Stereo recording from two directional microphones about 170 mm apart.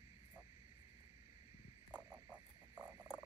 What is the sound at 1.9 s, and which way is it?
Frog, 20° right (ahead or behind).